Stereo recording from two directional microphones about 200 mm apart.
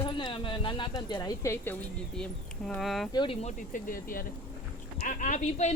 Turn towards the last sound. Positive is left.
turn(degrees=35)  # may be behind; listen again after turning